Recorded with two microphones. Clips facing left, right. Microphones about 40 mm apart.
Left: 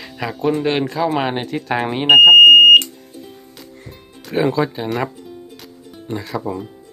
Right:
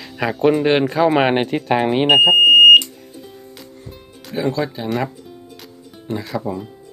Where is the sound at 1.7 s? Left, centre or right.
Centre.